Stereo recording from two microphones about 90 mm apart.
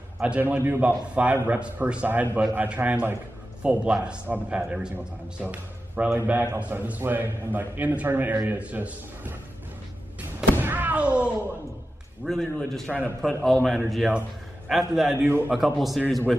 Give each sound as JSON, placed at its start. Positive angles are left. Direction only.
{"t": 0.2, "sound": "a man's voice", "side_deg": -15}
{"t": 6.1, "sound": "a man's voice", "side_deg": -25}
{"t": 10.6, "sound": "thunk", "side_deg": -20}
{"t": 12.3, "sound": "a man's voice", "side_deg": 5}
{"t": 15.2, "sound": "a man's voice", "side_deg": -25}
{"t": 15.5, "sound": "a man's voice", "side_deg": 0}